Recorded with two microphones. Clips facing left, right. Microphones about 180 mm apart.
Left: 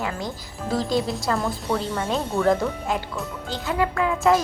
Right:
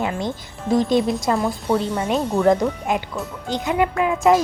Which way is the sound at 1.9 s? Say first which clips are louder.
Right 4 dB; 15° right (ahead or behind).